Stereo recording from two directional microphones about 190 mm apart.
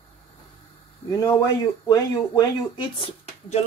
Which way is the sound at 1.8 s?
20° left (ahead or behind).